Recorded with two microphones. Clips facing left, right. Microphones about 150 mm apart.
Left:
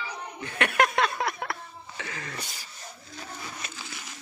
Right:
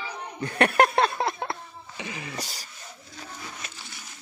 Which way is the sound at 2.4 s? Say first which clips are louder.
Right 3 dB; 35° right (ahead or behind).